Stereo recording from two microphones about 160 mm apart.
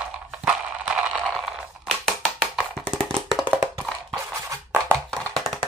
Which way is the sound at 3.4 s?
20° right (ahead or behind).